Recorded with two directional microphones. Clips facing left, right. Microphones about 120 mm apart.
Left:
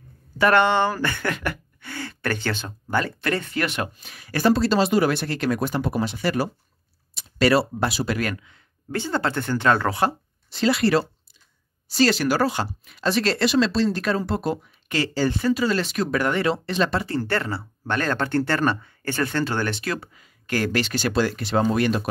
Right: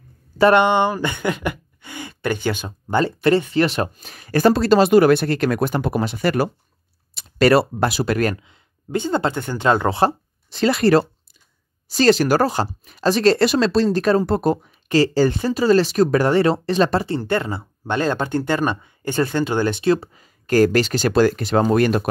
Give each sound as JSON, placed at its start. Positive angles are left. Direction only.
{"t": 0.4, "sound": "speech", "side_deg": -20}
{"t": 3.5, "sound": "speech", "side_deg": -30}
{"t": 8.4, "sound": "speech", "side_deg": -20}
{"t": 10.6, "sound": "speech", "side_deg": -45}
{"t": 17.0, "sound": "speech", "side_deg": -20}